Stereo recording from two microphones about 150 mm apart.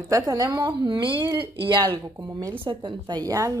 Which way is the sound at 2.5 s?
35° right (ahead or behind).